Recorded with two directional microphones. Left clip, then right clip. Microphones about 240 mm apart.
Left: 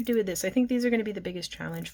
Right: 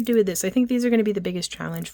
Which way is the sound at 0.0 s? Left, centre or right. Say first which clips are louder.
Right 6 dB; right.